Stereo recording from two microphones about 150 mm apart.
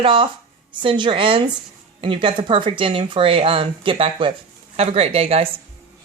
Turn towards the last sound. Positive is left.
turn(degrees=-40)  # may be behind; listen again after turning